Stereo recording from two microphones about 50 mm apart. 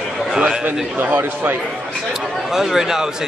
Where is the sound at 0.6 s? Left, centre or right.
Right.